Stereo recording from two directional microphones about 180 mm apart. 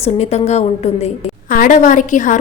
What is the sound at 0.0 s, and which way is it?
A woman's voice, 35° left (ahead or behind).